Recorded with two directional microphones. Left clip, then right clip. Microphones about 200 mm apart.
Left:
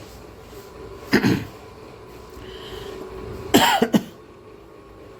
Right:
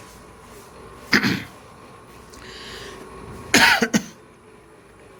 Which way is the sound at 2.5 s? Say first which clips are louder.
Left 1 dB; 25° left (ahead or behind).